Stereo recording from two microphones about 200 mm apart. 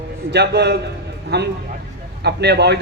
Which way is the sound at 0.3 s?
55° right (ahead or behind).